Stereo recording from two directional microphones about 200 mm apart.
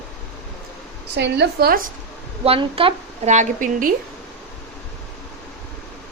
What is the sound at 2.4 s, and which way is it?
A woman's voice, 25° right (ahead or behind).